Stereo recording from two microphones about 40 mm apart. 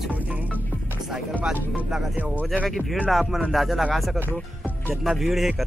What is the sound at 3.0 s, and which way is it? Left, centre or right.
Speech, centre.